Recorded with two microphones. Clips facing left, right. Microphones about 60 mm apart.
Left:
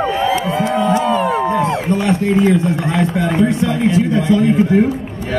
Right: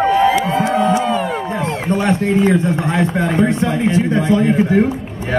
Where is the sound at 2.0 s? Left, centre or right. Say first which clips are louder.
Even; right.